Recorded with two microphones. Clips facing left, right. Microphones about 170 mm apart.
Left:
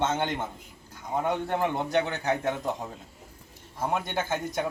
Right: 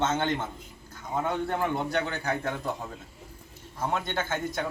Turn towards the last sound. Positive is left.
turn(degrees=10)  # may be behind; listen again after turning